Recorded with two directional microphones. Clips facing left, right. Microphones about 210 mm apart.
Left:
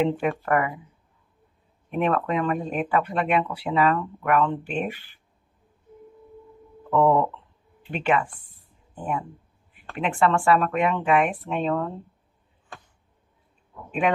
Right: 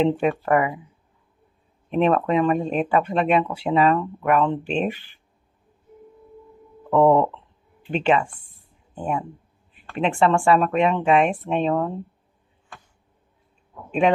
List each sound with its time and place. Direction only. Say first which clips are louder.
0.0 s speech: right 3 dB; 20° right (ahead or behind)
2.0 s speech: right 5 dB; 25° right (ahead or behind)
6.9 s speech: right 3 dB; 20° right (ahead or behind)